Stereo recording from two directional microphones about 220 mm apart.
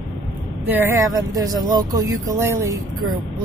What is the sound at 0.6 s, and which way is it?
Speech, 10° right (ahead or behind).